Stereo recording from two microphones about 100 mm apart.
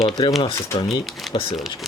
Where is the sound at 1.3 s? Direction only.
60° left (ahead or behind).